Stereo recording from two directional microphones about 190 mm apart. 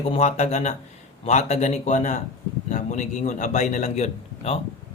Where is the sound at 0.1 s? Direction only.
35° left (ahead or behind).